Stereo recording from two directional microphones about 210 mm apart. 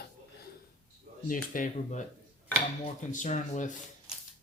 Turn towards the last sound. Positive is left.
turn(degrees=35)  # may be behind; listen again after turning